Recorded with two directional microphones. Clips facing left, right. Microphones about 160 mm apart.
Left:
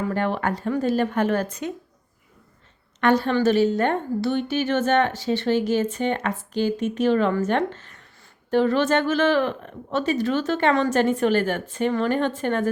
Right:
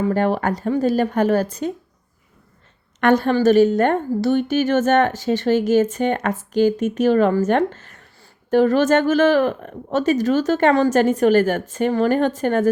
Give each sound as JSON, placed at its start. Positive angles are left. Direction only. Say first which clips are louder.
{"t": 0.1, "sound": "speech", "louder": "right 5 dB", "side_deg": -40}
{"t": 3.0, "sound": "speech", "louder": "right 4 dB", "side_deg": -50}